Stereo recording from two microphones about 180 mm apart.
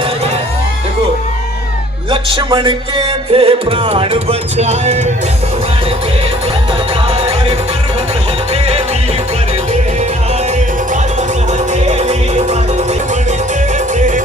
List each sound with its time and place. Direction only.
2.0 s music: 25° right (ahead or behind)
7.1 s music: 30° right (ahead or behind)
11.7 s music: 40° right (ahead or behind)